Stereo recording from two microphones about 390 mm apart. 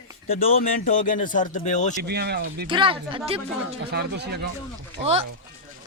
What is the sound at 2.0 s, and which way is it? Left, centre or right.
Speech, right.